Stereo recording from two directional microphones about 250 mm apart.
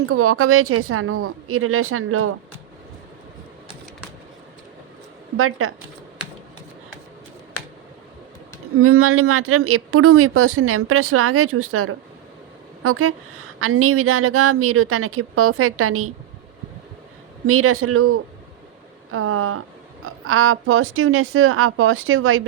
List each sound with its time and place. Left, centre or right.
0.1 s speech: right
5.4 s speech: right
8.8 s speech: right
17.4 s speech: right